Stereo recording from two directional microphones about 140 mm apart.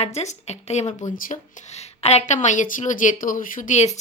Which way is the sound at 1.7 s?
50° left (ahead or behind).